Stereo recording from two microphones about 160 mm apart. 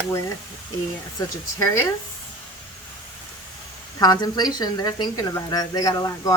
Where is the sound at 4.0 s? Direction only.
25° left (ahead or behind).